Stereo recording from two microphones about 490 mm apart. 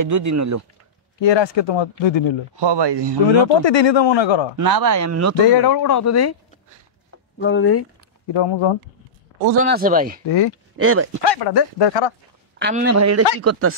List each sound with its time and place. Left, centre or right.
0.0 s speech: right
1.2 s speech: left
2.6 s speech: right
3.6 s speech: left
4.6 s speech: right
5.4 s speech: left
7.3 s speech: left
8.3 s speech: left
9.6 s speech: centre
10.2 s speech: left
10.8 s speech: right
11.2 s speech: left
12.5 s speech: right
12.9 s speech: right